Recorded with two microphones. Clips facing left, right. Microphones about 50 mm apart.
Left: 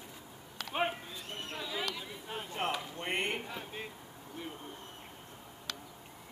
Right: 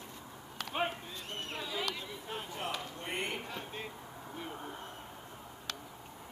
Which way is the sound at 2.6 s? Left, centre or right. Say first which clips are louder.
Left 7 dB; left.